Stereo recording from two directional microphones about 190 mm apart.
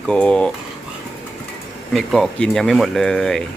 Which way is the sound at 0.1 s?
5° left (ahead or behind).